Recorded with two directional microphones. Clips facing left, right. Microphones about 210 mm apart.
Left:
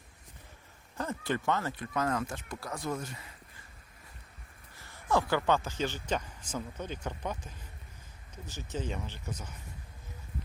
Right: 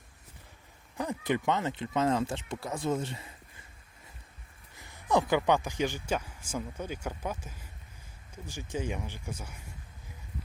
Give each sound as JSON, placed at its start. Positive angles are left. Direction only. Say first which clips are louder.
{"t": 0.9, "sound": "speech", "louder": "right 3 dB", "side_deg": -15}
{"t": 4.8, "sound": "speech", "louder": "right 2 dB", "side_deg": -15}